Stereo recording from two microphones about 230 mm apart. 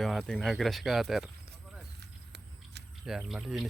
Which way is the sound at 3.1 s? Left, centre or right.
Centre.